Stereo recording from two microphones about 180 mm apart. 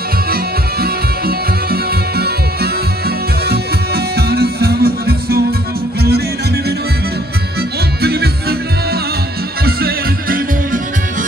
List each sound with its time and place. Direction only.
0.3 s music: 60° right (ahead or behind)
8.0 s music: 60° right (ahead or behind)